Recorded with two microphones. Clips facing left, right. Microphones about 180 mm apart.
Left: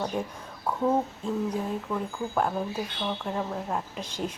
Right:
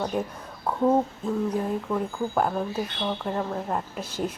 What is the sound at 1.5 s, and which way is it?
A woman's voice, 5° right (ahead or behind).